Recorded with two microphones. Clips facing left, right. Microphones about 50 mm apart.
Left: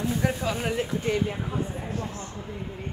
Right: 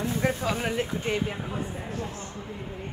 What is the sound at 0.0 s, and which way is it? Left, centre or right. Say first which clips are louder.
Speech: even; right.